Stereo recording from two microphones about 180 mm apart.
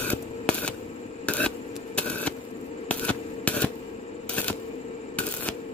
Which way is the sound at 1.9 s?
5° left (ahead or behind).